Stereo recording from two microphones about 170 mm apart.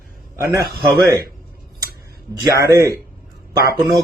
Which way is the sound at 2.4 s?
20° right (ahead or behind).